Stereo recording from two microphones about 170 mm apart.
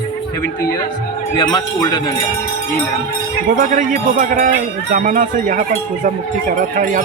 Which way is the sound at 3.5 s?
50° right (ahead or behind).